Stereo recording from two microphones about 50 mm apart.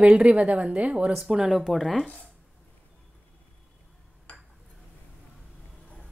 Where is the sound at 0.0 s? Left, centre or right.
Right.